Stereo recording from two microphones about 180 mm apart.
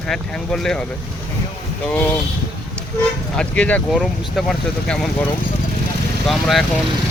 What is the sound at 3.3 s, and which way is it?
Speech, 5° left (ahead or behind).